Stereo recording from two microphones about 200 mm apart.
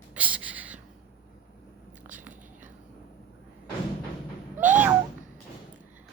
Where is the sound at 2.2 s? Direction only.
40° right (ahead or behind).